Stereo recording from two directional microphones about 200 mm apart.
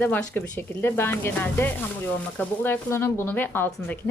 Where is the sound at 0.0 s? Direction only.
10° left (ahead or behind).